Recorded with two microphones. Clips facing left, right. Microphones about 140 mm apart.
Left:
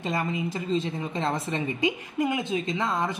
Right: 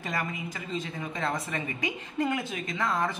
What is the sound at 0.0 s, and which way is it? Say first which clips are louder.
A woman's voice: left 5 dB; 25° left (ahead or behind).